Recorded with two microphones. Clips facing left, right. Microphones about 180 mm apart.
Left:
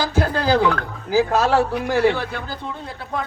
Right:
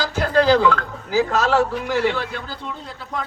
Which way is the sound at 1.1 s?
55° left (ahead or behind).